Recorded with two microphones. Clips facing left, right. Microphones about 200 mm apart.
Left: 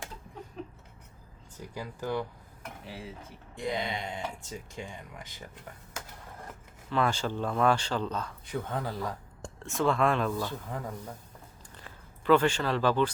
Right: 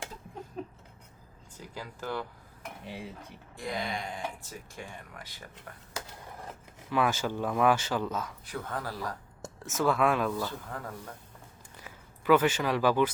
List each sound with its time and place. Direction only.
1.7 s speech: 15° left (ahead or behind)
3.5 s speech: 20° left (ahead or behind)
6.9 s speech: 10° right (ahead or behind)
8.4 s speech: 20° left (ahead or behind)
9.4 s speech: 5° right (ahead or behind)
10.7 s speech: 15° left (ahead or behind)
11.8 s a sound: 5° right (ahead or behind)